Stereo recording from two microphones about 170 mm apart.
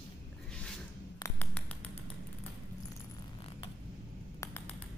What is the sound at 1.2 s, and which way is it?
Finger snapping, 10° left (ahead or behind).